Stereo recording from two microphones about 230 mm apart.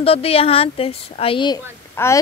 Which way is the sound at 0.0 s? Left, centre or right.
Left.